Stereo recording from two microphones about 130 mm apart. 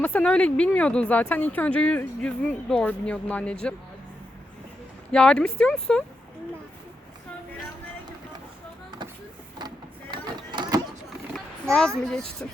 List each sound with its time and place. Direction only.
0.0 s speech: 10° left (ahead or behind)
5.1 s speech: 5° left (ahead or behind)
9.6 s a sound: 30° right (ahead or behind)
12.0 s speech: 5° left (ahead or behind)